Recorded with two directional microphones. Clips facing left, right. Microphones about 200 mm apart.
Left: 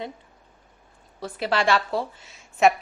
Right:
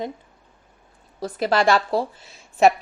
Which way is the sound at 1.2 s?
40° right (ahead or behind).